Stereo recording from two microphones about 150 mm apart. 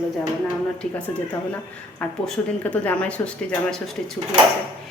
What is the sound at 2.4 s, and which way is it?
Speech, 15° left (ahead or behind).